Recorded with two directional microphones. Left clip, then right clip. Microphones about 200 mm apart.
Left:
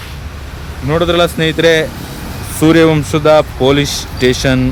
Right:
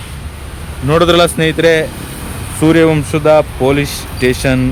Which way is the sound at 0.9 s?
45° right (ahead or behind).